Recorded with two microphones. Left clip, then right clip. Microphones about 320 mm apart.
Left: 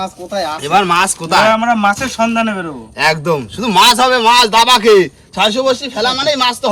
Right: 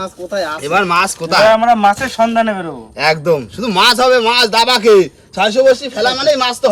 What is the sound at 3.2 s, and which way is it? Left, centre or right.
A man's voice, centre.